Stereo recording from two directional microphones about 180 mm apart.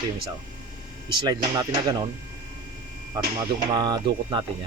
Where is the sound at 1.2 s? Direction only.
20° right (ahead or behind).